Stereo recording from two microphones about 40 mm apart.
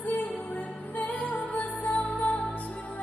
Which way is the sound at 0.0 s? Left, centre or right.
Left.